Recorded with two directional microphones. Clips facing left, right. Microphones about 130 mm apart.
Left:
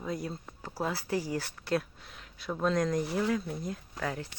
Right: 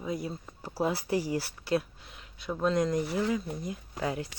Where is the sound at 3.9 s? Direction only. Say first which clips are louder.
Right 4 dB; 15° right (ahead or behind).